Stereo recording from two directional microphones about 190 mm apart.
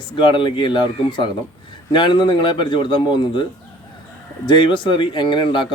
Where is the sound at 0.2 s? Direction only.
25° left (ahead or behind).